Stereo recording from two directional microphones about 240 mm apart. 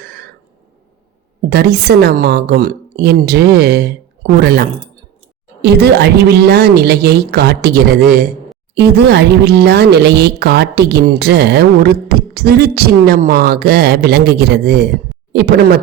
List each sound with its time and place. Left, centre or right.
1.5 s speech: right